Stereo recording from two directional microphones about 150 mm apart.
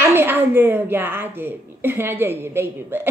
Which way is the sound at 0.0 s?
15° right (ahead or behind).